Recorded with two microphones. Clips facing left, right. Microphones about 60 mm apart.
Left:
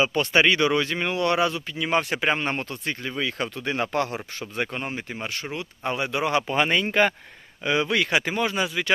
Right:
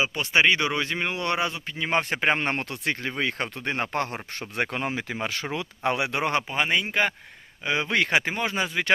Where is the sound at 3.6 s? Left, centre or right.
Right.